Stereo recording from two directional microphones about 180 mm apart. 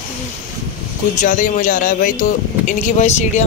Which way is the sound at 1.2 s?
45° left (ahead or behind).